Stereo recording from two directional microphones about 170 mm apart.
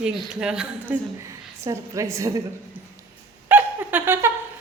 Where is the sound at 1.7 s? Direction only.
20° right (ahead or behind).